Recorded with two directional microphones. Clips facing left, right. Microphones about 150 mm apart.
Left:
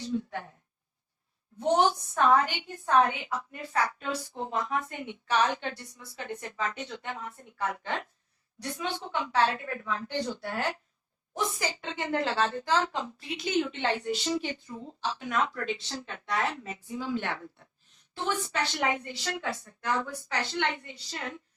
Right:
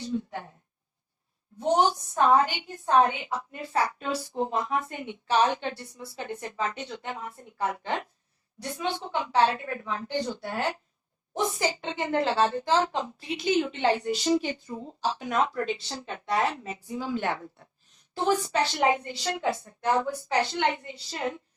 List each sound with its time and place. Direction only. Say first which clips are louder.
0.1 s a woman's voice: even; 20° right (ahead or behind)
1.5 s a woman's voice: right 1 dB; 25° right (ahead or behind)